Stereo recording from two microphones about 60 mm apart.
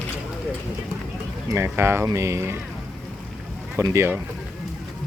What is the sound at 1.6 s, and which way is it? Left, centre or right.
Speech, right.